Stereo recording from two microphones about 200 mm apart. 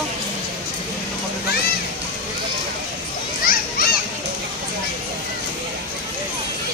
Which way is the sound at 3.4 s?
45° left (ahead or behind).